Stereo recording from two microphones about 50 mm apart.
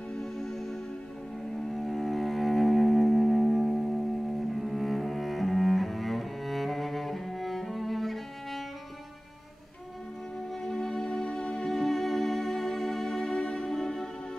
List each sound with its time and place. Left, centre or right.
0.2 s music: centre
1.7 s cello: centre
10.6 s music: centre